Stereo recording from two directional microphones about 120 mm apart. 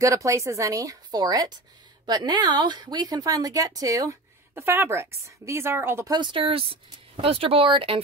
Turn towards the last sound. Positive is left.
turn(degrees=-50)  # may be behind; listen again after turning